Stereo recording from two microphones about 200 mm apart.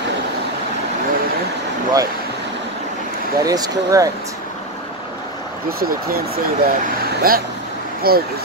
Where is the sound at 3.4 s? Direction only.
20° right (ahead or behind).